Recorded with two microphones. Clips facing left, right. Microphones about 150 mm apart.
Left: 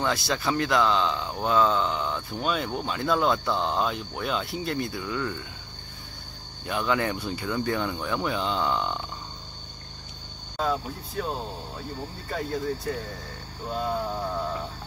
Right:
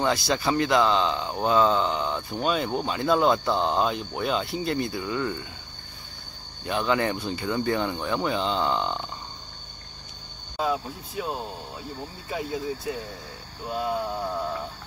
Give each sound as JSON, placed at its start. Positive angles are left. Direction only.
{"t": 0.0, "sound": "speech", "side_deg": 0}
{"t": 6.9, "sound": "speech", "side_deg": 0}
{"t": 8.7, "sound": "burping", "side_deg": -30}
{"t": 10.6, "sound": "speech", "side_deg": -5}